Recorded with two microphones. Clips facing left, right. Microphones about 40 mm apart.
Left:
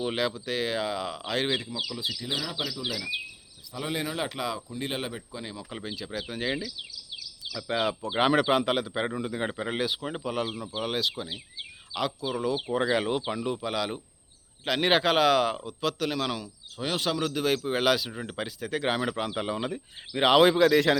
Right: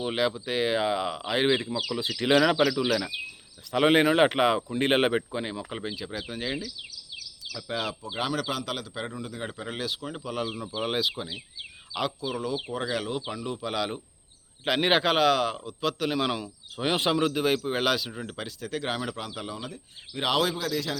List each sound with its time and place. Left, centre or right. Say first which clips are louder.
0.0 s speech: right 2 dB; centre
1.5 s speech: right 5 dB; right
1.9 s speech: right 3 dB; right
2.2 s speech: right 15 dB; right
5.3 s speech: right 6 dB; right
5.7 s speech: right 1 dB; centre
8.1 s a man's voice: left 8 dB; left; by 10.5 s centre
10.8 s speech: right 1 dB; centre
12.2 s speech: left 2 dB; centre
16.7 s speech: right 3 dB; right
17.3 s speech: right 1 dB; centre
19.3 s a man's voice: left 6 dB; left